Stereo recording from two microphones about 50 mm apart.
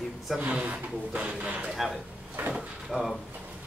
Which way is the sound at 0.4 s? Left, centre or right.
Right.